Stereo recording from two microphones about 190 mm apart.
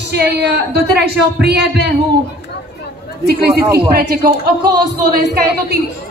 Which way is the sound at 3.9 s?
55° right (ahead or behind).